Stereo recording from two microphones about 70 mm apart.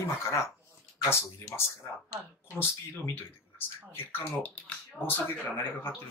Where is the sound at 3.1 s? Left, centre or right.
Left.